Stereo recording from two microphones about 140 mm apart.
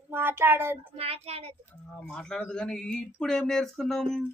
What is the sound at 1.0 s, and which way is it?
Speech, 45° right (ahead or behind).